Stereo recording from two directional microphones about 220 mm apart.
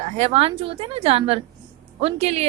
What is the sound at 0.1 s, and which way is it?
A woman's voice, 30° right (ahead or behind).